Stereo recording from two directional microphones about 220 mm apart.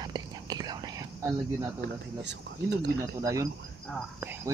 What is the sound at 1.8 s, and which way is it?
Speech, 50° right (ahead or behind).